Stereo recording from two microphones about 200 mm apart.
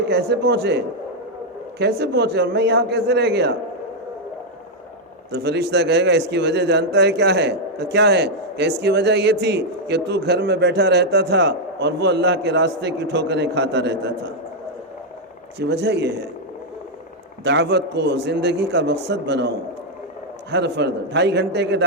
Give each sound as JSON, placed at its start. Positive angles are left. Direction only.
{"t": 0.1, "sound": "a man's voice", "side_deg": -55}
{"t": 1.8, "sound": "a man's voice", "side_deg": -55}
{"t": 5.3, "sound": "a man's voice", "side_deg": -55}
{"t": 15.5, "sound": "a man's voice", "side_deg": -55}
{"t": 17.4, "sound": "a man's voice", "side_deg": -60}